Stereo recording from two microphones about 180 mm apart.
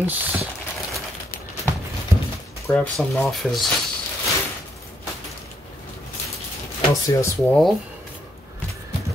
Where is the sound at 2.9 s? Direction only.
Centre (ahead or behind).